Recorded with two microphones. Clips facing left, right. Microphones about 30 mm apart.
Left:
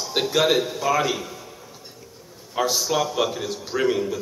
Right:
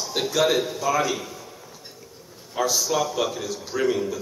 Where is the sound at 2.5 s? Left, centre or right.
Left.